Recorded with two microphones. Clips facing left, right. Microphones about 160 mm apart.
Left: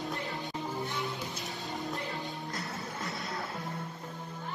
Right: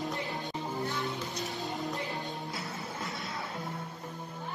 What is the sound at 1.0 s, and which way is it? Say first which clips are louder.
Music: right 2 dB; centre (ahead or behind).